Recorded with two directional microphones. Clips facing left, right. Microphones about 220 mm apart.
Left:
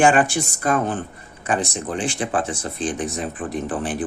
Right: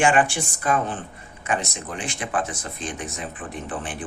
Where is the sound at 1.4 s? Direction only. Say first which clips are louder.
Left 4 dB; 35° left (ahead or behind).